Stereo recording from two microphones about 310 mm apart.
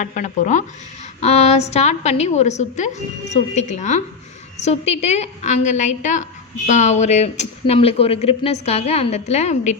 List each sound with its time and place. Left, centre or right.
0.0 s speech: left